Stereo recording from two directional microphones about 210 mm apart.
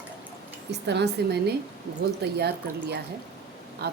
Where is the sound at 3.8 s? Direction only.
50° right (ahead or behind).